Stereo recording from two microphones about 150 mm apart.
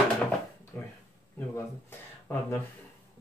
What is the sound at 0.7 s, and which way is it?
Speech, 15° left (ahead or behind).